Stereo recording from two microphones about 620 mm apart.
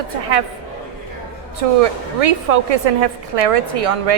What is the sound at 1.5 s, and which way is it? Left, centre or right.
Speech, right.